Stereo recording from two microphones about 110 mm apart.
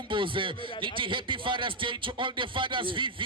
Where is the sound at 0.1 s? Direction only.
50° right (ahead or behind).